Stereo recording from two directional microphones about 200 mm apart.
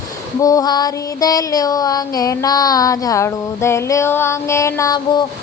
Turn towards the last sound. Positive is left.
turn(degrees=20)  # may be behind; listen again after turning